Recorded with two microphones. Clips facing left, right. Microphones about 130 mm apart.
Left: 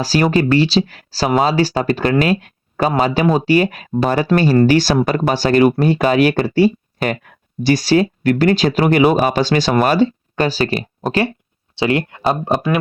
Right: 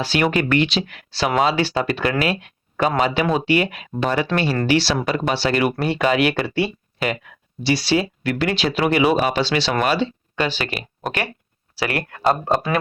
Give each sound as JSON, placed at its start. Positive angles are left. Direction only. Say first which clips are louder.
{"t": 0.0, "sound": "speech", "louder": "left 5 dB", "side_deg": 35}
{"t": 2.2, "sound": "a sound", "louder": "left 5 dB", "side_deg": 40}
{"t": 3.0, "sound": "speech", "louder": "left 4 dB", "side_deg": 40}
{"t": 11.7, "sound": "speech", "louder": "left 7 dB", "side_deg": 25}